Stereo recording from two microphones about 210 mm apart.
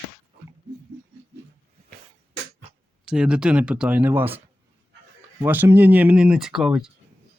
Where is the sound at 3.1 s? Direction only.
5° right (ahead or behind).